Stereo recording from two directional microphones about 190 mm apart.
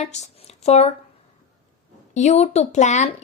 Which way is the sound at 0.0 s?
35° left (ahead or behind).